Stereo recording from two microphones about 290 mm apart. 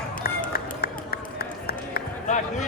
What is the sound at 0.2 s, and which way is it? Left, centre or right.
Run, left.